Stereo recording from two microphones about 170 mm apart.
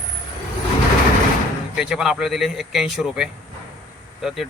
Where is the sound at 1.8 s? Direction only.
5° right (ahead or behind).